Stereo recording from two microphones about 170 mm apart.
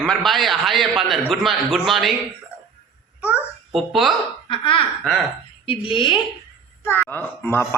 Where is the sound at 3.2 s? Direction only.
5° right (ahead or behind).